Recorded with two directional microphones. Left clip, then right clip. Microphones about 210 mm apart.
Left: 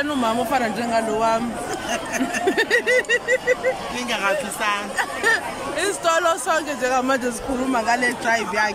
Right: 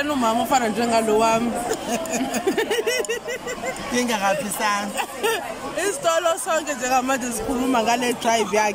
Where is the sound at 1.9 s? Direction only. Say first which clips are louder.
Left 1 dB; 15° right (ahead or behind).